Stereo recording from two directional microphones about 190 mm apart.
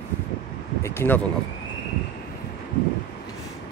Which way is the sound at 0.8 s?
10° left (ahead or behind).